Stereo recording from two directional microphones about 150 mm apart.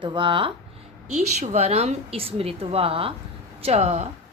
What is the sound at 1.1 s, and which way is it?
A woman's voice, 45° right (ahead or behind).